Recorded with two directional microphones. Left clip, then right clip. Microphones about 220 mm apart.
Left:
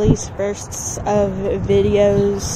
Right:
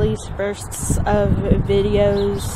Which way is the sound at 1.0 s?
10° left (ahead or behind).